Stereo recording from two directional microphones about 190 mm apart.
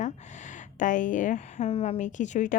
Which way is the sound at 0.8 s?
45° left (ahead or behind).